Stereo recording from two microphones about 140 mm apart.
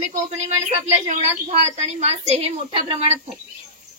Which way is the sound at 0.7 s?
50° right (ahead or behind).